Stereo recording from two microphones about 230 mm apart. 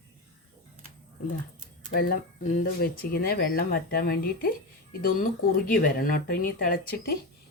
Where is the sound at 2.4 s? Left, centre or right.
Left.